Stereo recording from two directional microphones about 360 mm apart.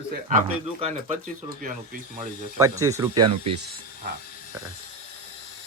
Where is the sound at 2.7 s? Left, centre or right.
Centre.